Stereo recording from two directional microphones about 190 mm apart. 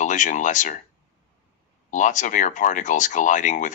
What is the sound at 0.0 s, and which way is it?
Speech, 40° left (ahead or behind).